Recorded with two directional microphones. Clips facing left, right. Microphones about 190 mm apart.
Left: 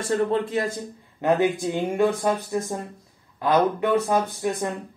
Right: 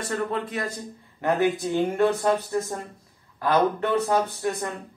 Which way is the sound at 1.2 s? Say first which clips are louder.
Left 2 dB; 15° left (ahead or behind).